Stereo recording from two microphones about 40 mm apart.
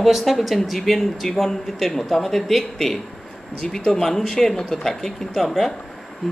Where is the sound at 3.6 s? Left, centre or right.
Centre.